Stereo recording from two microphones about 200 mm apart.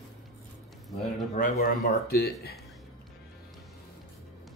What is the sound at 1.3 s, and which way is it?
Speech, 40° left (ahead or behind).